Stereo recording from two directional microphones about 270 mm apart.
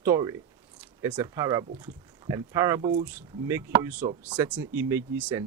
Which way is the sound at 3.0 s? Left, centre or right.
Centre.